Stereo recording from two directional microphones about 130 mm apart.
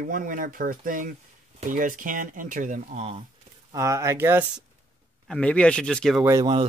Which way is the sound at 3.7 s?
25° right (ahead or behind).